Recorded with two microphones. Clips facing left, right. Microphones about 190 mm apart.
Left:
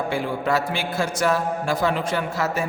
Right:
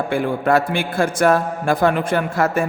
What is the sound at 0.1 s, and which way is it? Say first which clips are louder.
A man's voice: right 8 dB; 55° right (ahead or behind).